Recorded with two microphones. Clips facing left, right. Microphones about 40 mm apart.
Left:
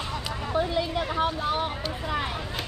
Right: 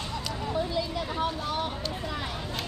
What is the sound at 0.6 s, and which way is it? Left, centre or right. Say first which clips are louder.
Vehicle: left 5 dB; left.